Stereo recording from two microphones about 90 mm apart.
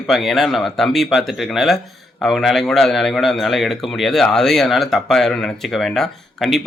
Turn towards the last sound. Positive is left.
turn(degrees=0)  # may be behind; listen again after turning